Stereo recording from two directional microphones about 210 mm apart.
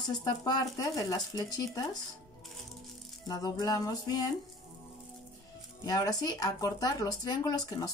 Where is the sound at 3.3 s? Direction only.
20° left (ahead or behind).